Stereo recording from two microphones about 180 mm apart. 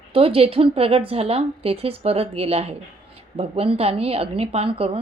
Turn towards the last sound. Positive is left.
turn(degrees=-30)  # may be behind; listen again after turning